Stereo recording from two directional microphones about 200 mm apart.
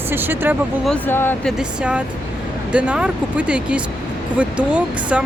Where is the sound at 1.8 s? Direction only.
5° right (ahead or behind).